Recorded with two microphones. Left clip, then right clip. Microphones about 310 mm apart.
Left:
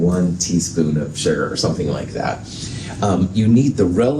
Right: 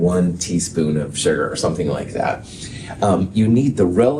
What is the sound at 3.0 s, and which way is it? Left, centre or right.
Speech, right.